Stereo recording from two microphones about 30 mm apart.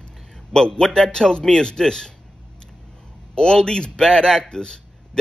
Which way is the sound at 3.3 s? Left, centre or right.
Left.